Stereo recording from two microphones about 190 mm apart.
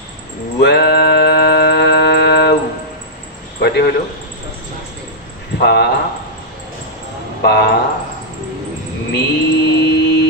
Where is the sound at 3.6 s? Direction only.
60° left (ahead or behind).